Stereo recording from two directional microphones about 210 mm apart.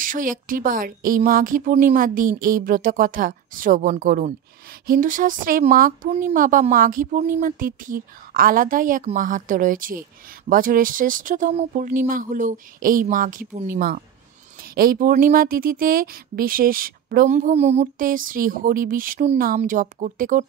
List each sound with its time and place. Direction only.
0.0 s a woman's voice: 40° right (ahead or behind)